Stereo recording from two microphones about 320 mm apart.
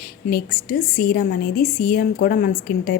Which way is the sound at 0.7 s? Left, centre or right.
Left.